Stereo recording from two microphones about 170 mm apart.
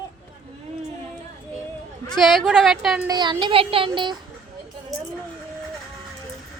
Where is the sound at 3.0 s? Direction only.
25° right (ahead or behind).